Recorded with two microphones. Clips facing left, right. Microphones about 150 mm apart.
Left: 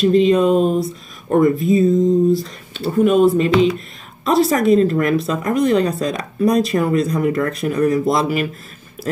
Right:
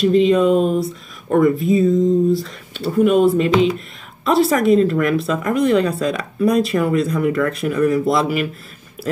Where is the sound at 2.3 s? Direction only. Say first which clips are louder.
Left 1 dB; 35° left (ahead or behind).